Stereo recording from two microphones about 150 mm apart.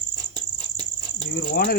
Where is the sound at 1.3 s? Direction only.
75° left (ahead or behind).